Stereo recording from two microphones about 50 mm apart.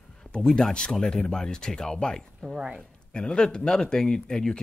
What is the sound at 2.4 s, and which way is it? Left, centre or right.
Speech, centre.